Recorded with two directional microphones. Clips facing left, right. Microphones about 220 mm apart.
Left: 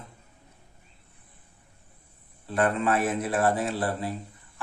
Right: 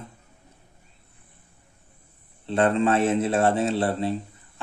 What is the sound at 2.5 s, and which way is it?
A man's voice, 25° right (ahead or behind).